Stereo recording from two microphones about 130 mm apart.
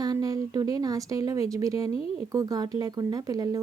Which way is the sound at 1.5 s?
25° right (ahead or behind).